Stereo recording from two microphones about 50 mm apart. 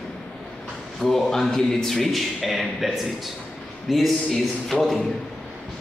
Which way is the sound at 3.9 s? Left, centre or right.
Centre.